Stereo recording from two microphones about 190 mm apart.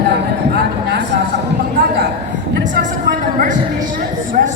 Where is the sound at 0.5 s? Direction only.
60° right (ahead or behind).